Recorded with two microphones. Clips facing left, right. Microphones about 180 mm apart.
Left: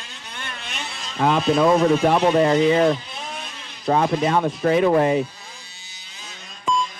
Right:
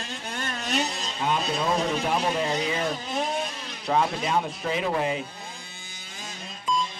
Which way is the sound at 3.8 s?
55° left (ahead or behind).